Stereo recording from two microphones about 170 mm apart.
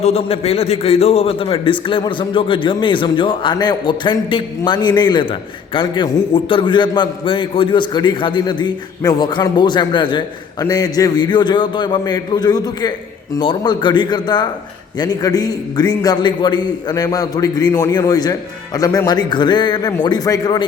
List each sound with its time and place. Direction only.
0.0 s a man's voice: 35° left (ahead or behind)